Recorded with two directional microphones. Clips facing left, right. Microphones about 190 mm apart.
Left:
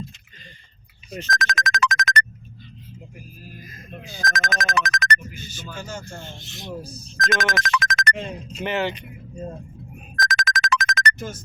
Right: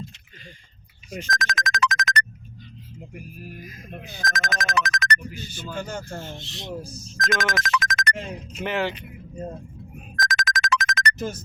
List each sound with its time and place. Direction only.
1.3 s music: 50° left (ahead or behind)
3.6 s speech: 10° right (ahead or behind)
4.3 s music: 50° left (ahead or behind)
5.5 s speech: 55° right (ahead or behind)
6.4 s speech: 30° right (ahead or behind)
7.3 s music: 55° left (ahead or behind)
8.6 s speech: centre (ahead or behind)
10.2 s music: 50° left (ahead or behind)